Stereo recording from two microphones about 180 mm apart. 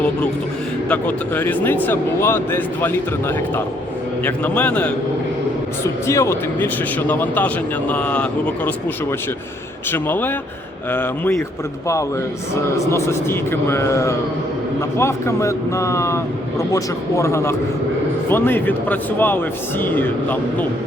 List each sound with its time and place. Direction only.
0.9 s speech: 10° left (ahead or behind)
9.9 s speech: 10° left (ahead or behind)
12.7 s speech: 15° left (ahead or behind)